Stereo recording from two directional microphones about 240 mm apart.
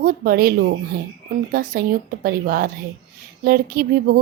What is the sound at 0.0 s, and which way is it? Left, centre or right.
Speech, right.